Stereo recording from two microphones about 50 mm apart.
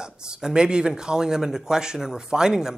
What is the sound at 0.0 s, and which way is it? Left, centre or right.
Speech, centre.